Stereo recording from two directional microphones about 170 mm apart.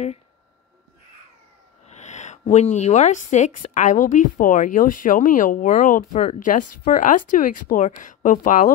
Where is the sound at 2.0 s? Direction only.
45° left (ahead or behind).